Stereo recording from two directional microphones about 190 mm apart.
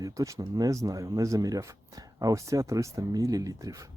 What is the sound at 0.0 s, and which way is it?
Speech, 15° right (ahead or behind).